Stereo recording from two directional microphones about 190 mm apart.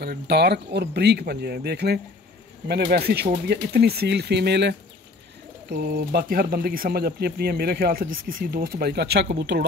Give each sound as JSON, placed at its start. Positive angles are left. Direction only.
{"t": 0.0, "sound": "speech", "side_deg": -55}